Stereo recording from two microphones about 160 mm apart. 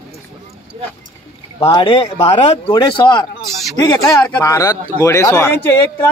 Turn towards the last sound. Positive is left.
turn(degrees=15)  # may be behind; listen again after turning